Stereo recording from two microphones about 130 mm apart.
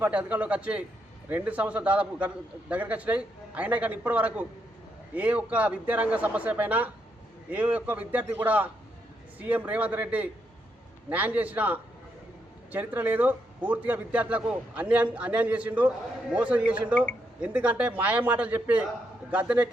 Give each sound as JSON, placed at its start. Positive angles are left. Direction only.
{"t": 0.0, "sound": "a man's voice", "side_deg": -10}